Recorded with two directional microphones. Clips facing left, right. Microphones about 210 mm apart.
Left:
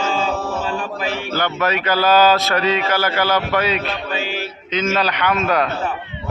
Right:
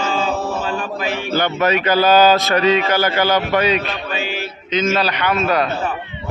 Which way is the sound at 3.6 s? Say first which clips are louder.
Right 2 dB; 5° left (ahead or behind).